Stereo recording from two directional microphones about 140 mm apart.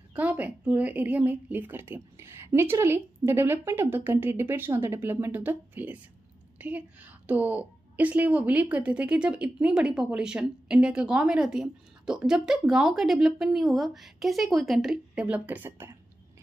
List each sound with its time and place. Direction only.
0.1 s a woman's voice: 10° right (ahead or behind)